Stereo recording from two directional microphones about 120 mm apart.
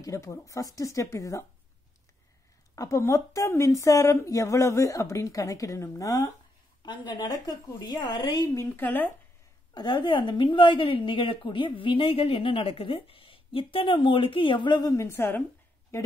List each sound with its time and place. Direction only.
0.0 s speech: 25° left (ahead or behind)
2.7 s speech: 25° left (ahead or behind)
6.8 s a woman's voice: 40° left (ahead or behind)
8.7 s speech: 15° left (ahead or behind)
9.8 s a woman's voice: 40° left (ahead or behind); by 15.4 s 20° left (ahead or behind)